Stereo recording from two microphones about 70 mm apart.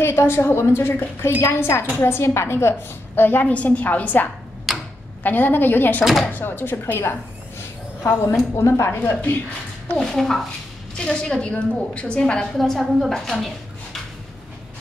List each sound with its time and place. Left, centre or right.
0.0 s a woman's voice: left
4.7 s tick-tock: centre
5.2 s a woman's voice: left
8.5 s a woman's voice: left
9.9 s a woman's voice: centre
12.5 s a woman's voice: centre